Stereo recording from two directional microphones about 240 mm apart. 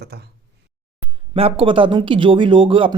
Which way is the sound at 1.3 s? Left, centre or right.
Right.